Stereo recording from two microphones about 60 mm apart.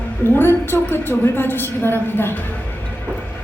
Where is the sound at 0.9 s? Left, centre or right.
Left.